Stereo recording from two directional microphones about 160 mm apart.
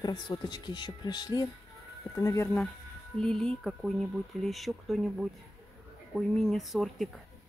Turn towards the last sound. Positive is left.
turn(degrees=0)  # may be behind; listen again after turning